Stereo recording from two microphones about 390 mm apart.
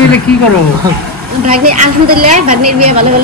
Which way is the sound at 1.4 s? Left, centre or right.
Right.